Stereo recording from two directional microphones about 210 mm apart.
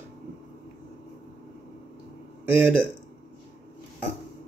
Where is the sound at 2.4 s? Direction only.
10° right (ahead or behind).